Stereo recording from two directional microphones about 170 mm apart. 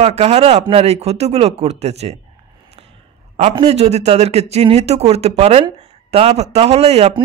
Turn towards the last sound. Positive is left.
turn(degrees=-35)  # may be behind; listen again after turning